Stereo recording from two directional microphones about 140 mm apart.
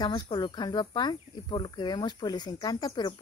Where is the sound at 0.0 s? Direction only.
30° left (ahead or behind).